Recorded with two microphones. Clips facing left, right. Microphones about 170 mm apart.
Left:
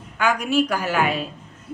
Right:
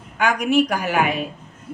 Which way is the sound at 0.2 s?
15° right (ahead or behind).